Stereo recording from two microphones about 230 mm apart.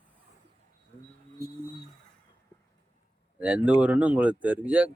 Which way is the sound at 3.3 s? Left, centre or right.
Centre.